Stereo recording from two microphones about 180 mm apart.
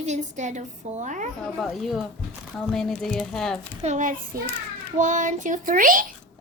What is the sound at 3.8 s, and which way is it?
Speech, 40° right (ahead or behind).